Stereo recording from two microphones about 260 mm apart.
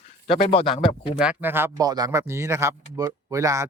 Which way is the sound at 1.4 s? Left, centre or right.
Centre.